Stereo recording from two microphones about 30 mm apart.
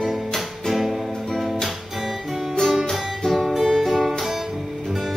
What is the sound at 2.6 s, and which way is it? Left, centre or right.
Music, left.